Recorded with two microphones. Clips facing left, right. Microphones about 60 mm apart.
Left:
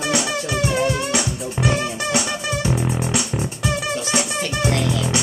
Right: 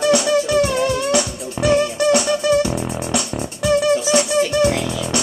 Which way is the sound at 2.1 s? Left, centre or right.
Centre.